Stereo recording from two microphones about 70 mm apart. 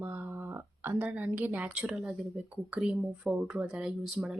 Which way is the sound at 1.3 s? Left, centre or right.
Right.